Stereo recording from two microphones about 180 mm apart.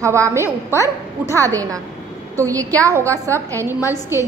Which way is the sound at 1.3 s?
20° right (ahead or behind).